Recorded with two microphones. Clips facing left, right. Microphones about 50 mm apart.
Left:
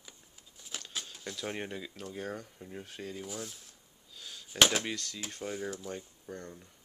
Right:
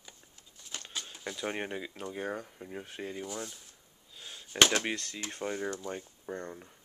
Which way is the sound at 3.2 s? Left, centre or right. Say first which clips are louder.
Right 2 dB; centre.